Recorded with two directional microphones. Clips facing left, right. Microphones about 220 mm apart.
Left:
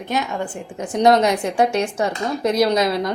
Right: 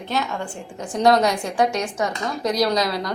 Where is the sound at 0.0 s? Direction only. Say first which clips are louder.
Left 2 dB; 20° left (ahead or behind).